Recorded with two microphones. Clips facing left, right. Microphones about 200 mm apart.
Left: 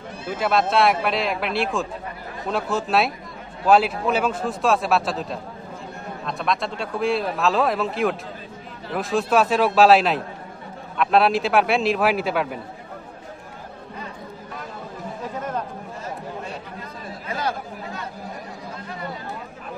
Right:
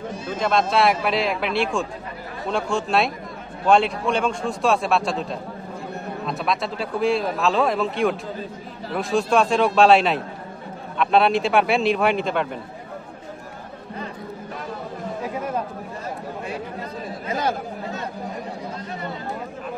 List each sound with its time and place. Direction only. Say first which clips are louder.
0.3 s speech: even; 5° left (ahead or behind)
15.3 s a sound: right 1 dB; 10° right (ahead or behind)
17.3 s chatter: right 3 dB; 20° right (ahead or behind)